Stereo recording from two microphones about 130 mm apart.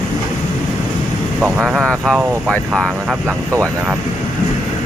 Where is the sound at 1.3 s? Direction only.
10° right (ahead or behind).